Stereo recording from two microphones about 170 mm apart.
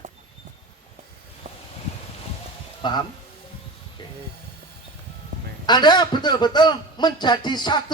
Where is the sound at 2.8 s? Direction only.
25° left (ahead or behind).